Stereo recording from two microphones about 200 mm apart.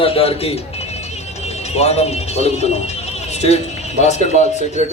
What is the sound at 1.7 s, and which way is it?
Speech, 30° left (ahead or behind).